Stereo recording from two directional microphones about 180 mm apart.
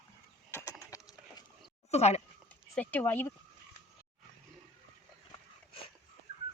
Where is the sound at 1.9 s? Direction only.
35° left (ahead or behind).